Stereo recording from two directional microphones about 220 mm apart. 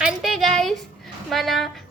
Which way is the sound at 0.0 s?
Centre (ahead or behind).